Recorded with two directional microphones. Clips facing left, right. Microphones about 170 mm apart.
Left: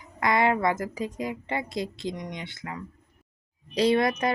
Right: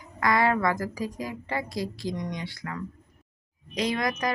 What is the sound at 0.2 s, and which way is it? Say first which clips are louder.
Speech: even; 20° left (ahead or behind).